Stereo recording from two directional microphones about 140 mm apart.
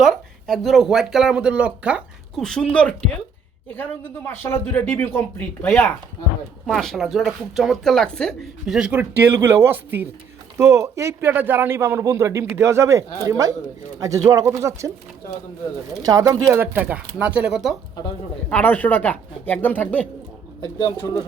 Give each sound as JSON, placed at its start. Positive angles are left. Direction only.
{"t": 0.0, "sound": "speech", "side_deg": 0}
{"t": 2.4, "sound": "speech", "side_deg": 5}
{"t": 4.3, "sound": "a man's voice", "side_deg": 15}
{"t": 16.0, "sound": "speech", "side_deg": -25}
{"t": 18.4, "sound": "speech", "side_deg": 10}
{"t": 20.6, "sound": "speech", "side_deg": 30}